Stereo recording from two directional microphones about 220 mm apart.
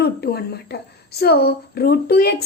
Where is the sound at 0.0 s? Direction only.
45° left (ahead or behind).